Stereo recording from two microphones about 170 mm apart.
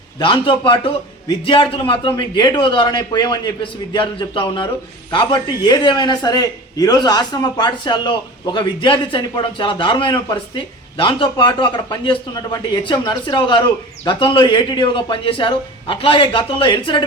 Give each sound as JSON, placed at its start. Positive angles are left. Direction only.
{"t": 0.2, "sound": "a man's voice", "side_deg": 30}